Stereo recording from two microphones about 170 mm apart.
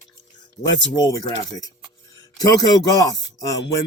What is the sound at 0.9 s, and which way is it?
Speech, 20° left (ahead or behind).